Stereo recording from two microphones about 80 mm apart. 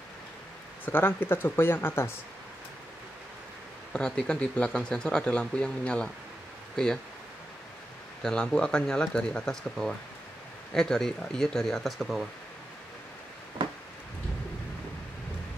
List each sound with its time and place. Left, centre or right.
0.8 s speech: left
3.9 s speech: centre
8.2 s speech: centre